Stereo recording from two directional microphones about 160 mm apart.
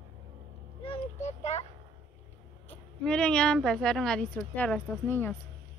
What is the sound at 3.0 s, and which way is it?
A woman's voice, 5° left (ahead or behind).